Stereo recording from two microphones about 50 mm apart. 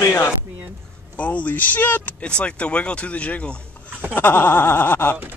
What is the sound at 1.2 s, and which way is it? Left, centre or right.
Speech, left.